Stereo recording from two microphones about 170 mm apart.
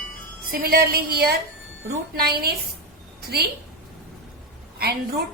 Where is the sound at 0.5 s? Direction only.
60° right (ahead or behind).